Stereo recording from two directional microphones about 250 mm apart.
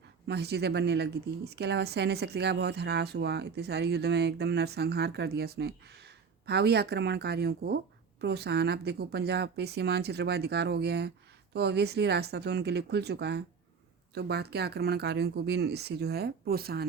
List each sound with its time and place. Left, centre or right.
0.3 s a woman's voice: right